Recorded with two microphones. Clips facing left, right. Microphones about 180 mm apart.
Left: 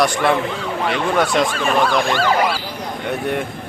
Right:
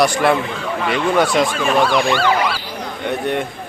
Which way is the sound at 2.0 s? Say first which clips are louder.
Right 2 dB; 45° left (ahead or behind).